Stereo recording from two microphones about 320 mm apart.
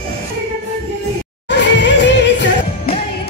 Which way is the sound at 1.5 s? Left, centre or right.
Left.